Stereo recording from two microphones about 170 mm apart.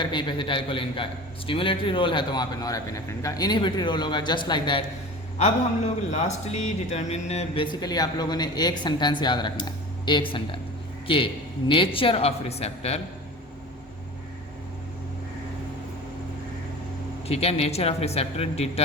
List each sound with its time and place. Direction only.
0.0 s a man's voice: 25° left (ahead or behind)
5.4 s a man's voice: 45° left (ahead or behind)
17.2 s a man's voice: 35° left (ahead or behind)